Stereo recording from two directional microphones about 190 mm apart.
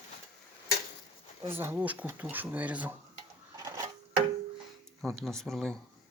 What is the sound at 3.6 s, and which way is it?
Dishes, 20° right (ahead or behind).